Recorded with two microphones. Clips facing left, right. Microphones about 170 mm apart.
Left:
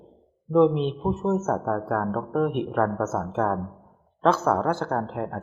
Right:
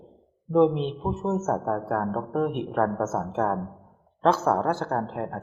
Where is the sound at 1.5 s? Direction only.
15° right (ahead or behind).